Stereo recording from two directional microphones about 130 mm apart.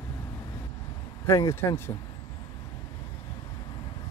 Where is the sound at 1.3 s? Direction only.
20° left (ahead or behind).